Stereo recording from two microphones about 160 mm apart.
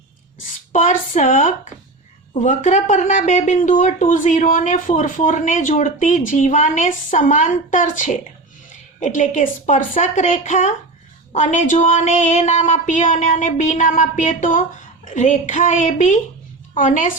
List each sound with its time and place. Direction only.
0.7 s a woman's voice: 50° left (ahead or behind)